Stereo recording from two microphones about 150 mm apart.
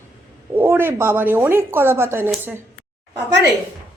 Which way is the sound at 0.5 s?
15° right (ahead or behind).